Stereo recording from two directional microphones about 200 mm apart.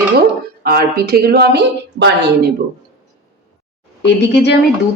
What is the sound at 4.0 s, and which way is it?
Speech, 60° left (ahead or behind).